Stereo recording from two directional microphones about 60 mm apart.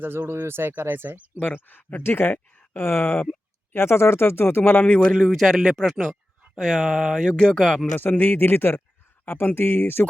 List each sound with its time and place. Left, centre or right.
0.0 s speech: right
1.4 s speech: left
4.8 s speech: left
5.1 s speech: centre
6.8 s speech: centre
7.3 s speech: centre
7.9 s speech: left